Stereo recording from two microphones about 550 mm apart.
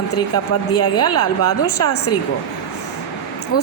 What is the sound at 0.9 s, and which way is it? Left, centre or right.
A woman's voice, left.